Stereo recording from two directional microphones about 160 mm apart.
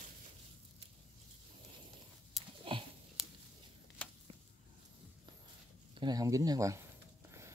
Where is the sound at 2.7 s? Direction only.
35° right (ahead or behind).